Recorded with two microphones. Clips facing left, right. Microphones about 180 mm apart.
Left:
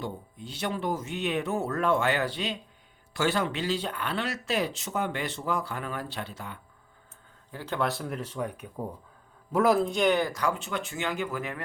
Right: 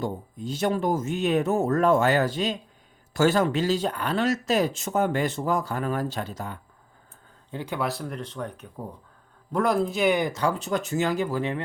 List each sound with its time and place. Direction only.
0.0 s speech: 45° right (ahead or behind)
7.6 s speech: 10° right (ahead or behind)
7.9 s speech: centre (ahead or behind)
10.3 s speech: 30° right (ahead or behind)